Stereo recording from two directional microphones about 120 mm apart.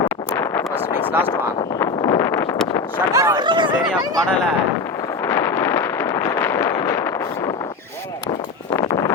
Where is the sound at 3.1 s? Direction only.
30° right (ahead or behind).